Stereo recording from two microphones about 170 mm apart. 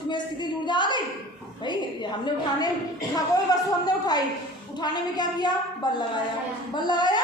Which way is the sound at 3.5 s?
20° left (ahead or behind).